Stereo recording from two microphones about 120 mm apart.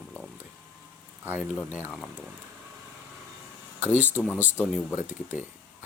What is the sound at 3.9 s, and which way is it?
Speech, 15° left (ahead or behind).